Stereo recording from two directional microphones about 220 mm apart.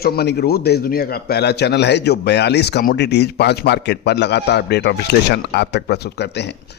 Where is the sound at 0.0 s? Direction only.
45° left (ahead or behind).